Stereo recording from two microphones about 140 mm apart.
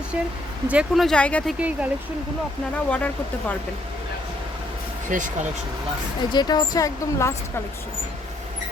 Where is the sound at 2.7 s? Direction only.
10° left (ahead or behind).